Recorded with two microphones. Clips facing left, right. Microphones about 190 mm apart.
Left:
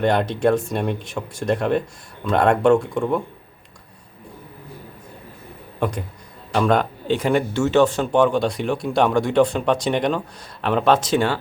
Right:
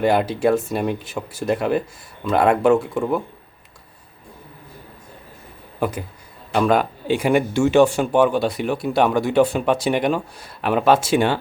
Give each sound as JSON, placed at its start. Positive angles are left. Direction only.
{"t": 0.0, "sound": "speech", "side_deg": -5}
{"t": 5.8, "sound": "speech", "side_deg": -5}